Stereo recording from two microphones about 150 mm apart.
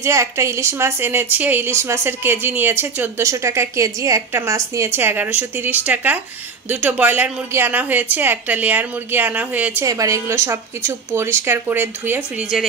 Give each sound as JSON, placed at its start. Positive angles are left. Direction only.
{"t": 0.0, "sound": "a woman's voice", "side_deg": -20}
{"t": 9.8, "sound": "a woman's voice", "side_deg": -20}